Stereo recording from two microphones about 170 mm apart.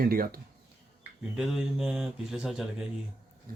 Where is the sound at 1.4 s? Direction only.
5° right (ahead or behind).